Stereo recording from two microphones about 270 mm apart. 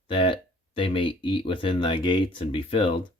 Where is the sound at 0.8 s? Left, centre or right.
Centre.